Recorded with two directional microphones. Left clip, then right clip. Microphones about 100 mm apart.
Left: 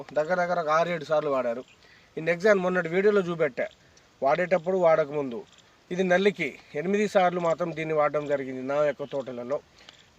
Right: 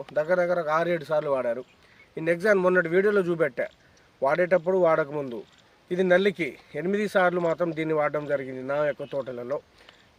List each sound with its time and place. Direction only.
0.1 s a man's voice: 30° right (ahead or behind)